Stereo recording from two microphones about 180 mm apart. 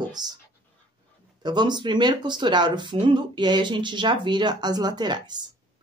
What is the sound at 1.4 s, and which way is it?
Speech, 25° right (ahead or behind).